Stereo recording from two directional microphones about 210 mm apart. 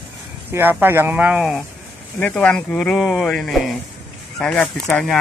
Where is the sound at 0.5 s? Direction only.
10° right (ahead or behind).